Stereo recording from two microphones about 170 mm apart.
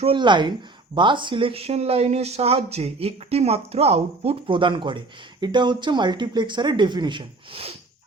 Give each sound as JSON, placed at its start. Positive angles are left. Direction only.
{"t": 0.0, "sound": "speech", "side_deg": -30}